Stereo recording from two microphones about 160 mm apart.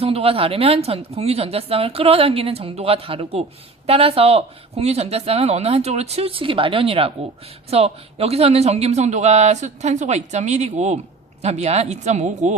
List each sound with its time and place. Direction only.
0.0 s speech: 40° right (ahead or behind)